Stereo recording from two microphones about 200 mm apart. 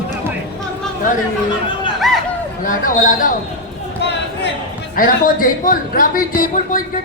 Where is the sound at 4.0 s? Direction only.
60° left (ahead or behind).